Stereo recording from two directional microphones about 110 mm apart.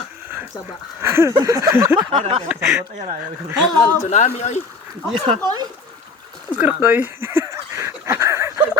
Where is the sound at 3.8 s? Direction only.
25° left (ahead or behind).